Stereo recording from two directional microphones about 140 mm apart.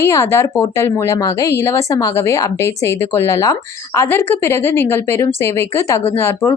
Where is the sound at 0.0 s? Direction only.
20° left (ahead or behind).